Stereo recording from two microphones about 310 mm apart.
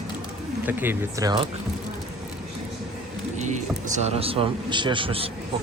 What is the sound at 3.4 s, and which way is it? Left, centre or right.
Speech, right.